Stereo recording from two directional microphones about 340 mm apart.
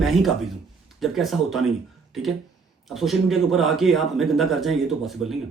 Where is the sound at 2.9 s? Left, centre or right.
Centre.